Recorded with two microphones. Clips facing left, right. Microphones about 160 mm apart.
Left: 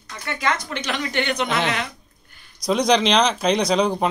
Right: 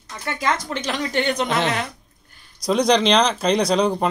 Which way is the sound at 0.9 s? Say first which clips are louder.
Right 2 dB; 40° right (ahead or behind).